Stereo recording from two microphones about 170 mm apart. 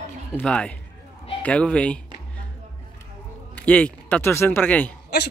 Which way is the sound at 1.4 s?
5° left (ahead or behind).